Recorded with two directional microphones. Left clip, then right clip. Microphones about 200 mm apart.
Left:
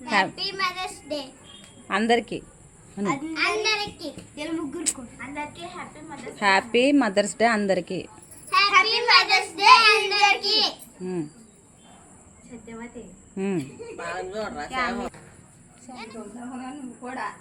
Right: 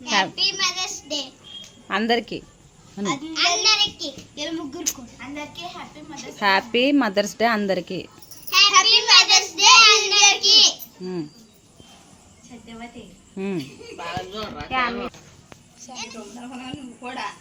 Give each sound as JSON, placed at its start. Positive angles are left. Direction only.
{"t": 0.0, "sound": "a child's voice", "side_deg": -5}
{"t": 0.5, "sound": "child singing", "side_deg": -5}
{"t": 1.9, "sound": "speech", "side_deg": -5}
{"t": 3.3, "sound": "child singing", "side_deg": -5}
{"t": 4.9, "sound": "speech", "side_deg": 0}
{"t": 6.3, "sound": "a woman's voice", "side_deg": -5}
{"t": 8.9, "sound": "child singing", "side_deg": -5}
{"t": 13.3, "sound": "speech", "side_deg": 0}
{"t": 14.5, "sound": "speech", "side_deg": -30}